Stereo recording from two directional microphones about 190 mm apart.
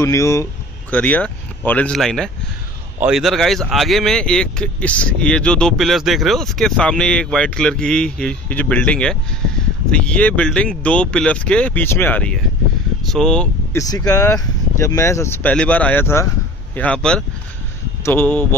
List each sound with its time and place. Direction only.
0.0 s speech: 15° left (ahead or behind)
13.7 s speech: 20° left (ahead or behind)